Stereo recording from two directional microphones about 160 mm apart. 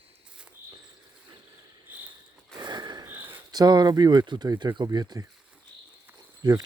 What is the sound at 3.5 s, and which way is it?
Speech, 25° right (ahead or behind).